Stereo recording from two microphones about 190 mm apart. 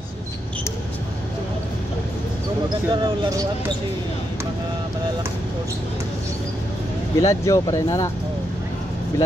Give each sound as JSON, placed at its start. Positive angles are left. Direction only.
{"t": 2.9, "sound": "speech", "side_deg": -20}
{"t": 7.2, "sound": "speech", "side_deg": 15}